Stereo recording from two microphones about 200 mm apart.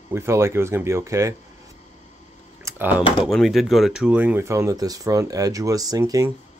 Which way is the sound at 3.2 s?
Centre (ahead or behind).